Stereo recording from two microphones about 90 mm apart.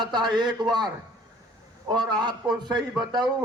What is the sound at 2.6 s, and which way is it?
Speech, 50° right (ahead or behind).